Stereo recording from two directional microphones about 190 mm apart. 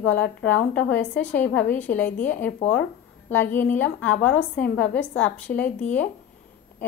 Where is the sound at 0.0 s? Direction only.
90° left.